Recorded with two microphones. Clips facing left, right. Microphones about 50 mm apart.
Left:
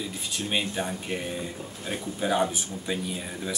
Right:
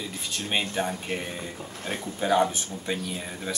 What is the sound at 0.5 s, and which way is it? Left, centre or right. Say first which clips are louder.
Speech: right 2 dB; right.